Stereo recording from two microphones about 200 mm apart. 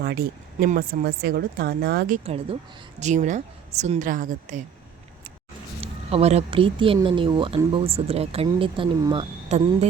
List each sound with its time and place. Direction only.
0.0 s speech: 50° right (ahead or behind)
2.1 s a woman's voice: 30° right (ahead or behind)
5.8 s speech: 30° right (ahead or behind)
9.5 s a woman's voice: 35° right (ahead or behind)